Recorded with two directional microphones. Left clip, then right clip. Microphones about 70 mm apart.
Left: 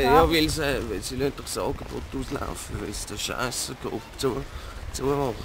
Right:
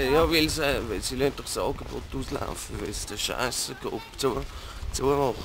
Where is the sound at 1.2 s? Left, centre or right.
Centre.